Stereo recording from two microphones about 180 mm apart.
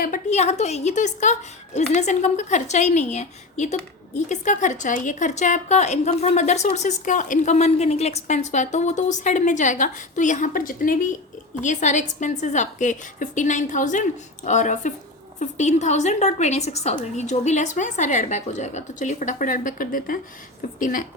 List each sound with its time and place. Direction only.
0.0 s a woman's voice: 45° left (ahead or behind)